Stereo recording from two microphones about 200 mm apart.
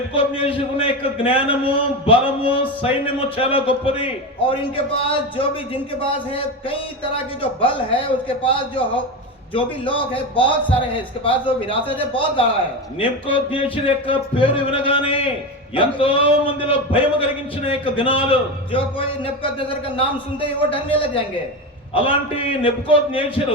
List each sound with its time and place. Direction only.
0.1 s a man's voice: 25° left (ahead or behind)
10.3 s a man's voice: 25° left (ahead or behind)